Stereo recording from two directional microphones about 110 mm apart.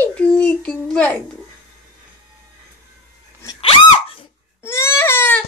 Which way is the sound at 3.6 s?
55° left (ahead or behind).